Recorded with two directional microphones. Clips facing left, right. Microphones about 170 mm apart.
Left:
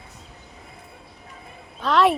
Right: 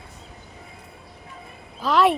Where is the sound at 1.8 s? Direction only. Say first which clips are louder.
Even; centre (ahead or behind).